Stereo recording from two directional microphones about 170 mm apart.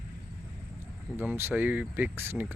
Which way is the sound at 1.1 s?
10° right (ahead or behind).